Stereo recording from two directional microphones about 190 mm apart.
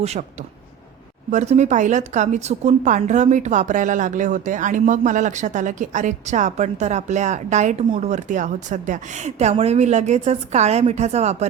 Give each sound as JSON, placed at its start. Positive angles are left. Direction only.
{"t": 0.0, "sound": "a woman's voice", "side_deg": -35}
{"t": 1.3, "sound": "a woman's voice", "side_deg": -35}